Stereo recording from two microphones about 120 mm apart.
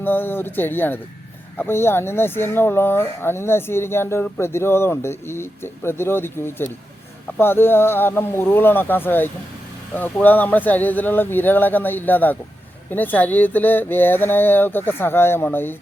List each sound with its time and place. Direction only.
0.0 s speech: 15° left (ahead or behind)